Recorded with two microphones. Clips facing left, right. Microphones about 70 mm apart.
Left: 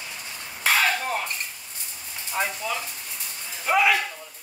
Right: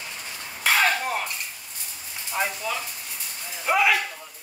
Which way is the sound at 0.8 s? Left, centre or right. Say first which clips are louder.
Right 1 dB; centre.